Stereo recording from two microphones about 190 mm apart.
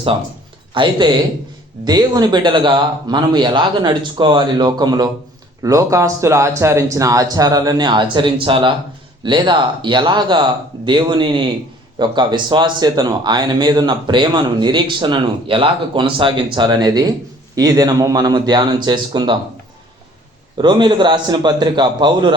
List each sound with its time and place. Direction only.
0.7 s speech: 25° right (ahead or behind)
20.6 s speech: 25° right (ahead or behind)